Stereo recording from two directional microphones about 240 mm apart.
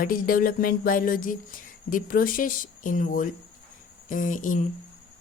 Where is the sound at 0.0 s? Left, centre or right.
Left.